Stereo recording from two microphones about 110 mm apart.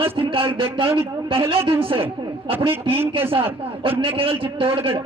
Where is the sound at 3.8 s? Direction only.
55° right (ahead or behind).